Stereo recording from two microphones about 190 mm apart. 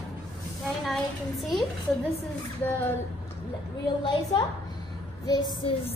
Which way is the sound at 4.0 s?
25° left (ahead or behind).